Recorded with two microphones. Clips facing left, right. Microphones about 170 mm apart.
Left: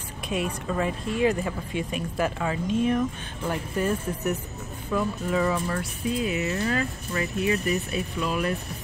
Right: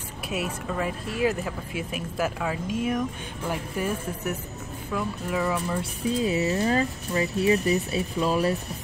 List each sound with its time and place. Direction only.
0.3 s speech: 5° right (ahead or behind)
5.8 s speech: 30° right (ahead or behind)